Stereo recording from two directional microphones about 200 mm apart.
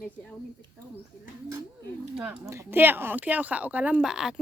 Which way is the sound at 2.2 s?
5° right (ahead or behind).